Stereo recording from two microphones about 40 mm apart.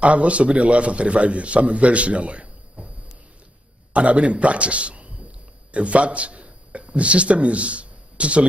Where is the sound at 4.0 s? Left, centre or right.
Right.